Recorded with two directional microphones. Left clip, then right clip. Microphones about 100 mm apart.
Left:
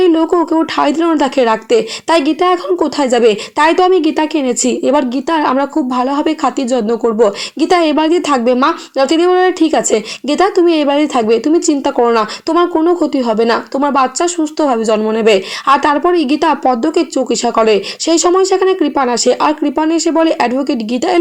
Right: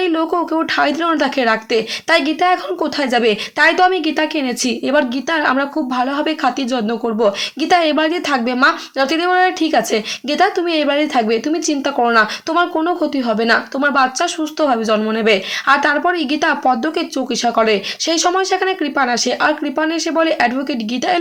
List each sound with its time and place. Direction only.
0.0 s speech: 35° left (ahead or behind)